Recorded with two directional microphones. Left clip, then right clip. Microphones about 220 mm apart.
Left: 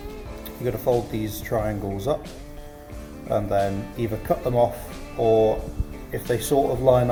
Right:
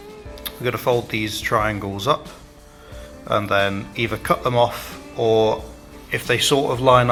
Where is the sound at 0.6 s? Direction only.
45° right (ahead or behind).